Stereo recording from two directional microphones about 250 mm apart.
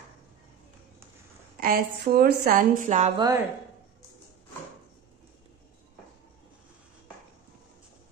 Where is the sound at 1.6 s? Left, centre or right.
Right.